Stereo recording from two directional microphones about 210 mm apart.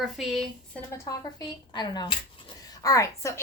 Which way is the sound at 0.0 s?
Centre (ahead or behind).